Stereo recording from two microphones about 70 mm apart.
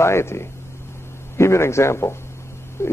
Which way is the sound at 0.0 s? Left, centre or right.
Left.